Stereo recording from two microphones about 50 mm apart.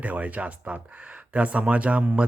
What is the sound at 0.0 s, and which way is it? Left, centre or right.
Speech, right.